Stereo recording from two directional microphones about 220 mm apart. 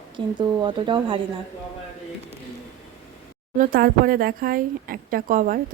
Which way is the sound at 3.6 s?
40° right (ahead or behind).